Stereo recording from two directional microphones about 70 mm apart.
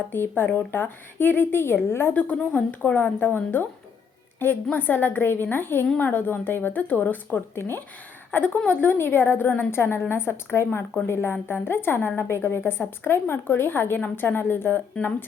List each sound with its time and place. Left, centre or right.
0.1 s a woman's voice: left
2.1 s a woman's voice: left